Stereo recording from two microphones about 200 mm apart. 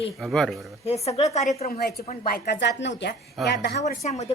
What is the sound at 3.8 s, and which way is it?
Speech, 35° left (ahead or behind).